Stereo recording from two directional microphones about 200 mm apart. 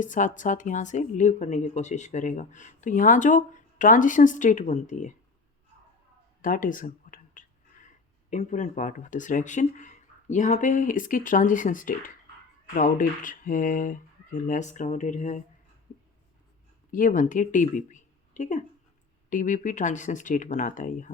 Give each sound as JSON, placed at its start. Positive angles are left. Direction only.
{"t": 0.0, "sound": "a woman's voice", "side_deg": 40}
{"t": 6.4, "sound": "a woman's voice", "side_deg": 45}
{"t": 16.9, "sound": "a woman's voice", "side_deg": 40}